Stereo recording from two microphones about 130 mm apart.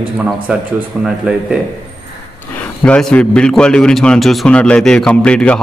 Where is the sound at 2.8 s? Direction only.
10° left (ahead or behind).